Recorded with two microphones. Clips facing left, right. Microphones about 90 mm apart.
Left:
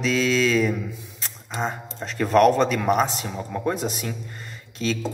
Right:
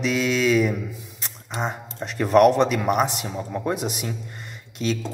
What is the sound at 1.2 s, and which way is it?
Squish, 15° right (ahead or behind).